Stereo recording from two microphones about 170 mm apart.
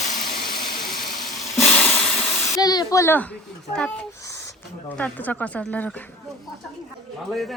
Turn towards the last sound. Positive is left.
turn(degrees=0)  # may be behind; listen again after turning